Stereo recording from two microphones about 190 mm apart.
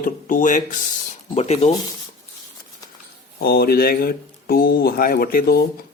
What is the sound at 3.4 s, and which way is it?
Speech, 55° left (ahead or behind).